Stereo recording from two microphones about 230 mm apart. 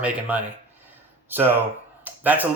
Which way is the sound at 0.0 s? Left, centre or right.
Centre.